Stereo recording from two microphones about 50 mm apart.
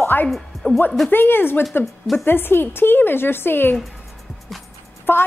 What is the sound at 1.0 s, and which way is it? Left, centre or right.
Speech, left.